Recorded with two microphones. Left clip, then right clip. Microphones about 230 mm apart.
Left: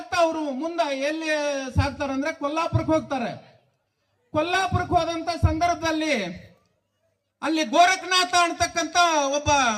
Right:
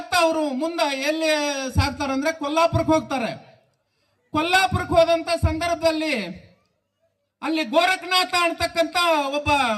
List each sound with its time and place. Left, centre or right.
0.1 s speech: right
7.3 s speech: right